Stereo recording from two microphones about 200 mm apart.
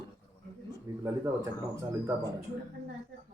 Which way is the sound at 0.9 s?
15° right (ahead or behind).